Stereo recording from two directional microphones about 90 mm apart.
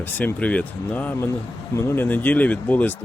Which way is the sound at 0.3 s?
15° left (ahead or behind).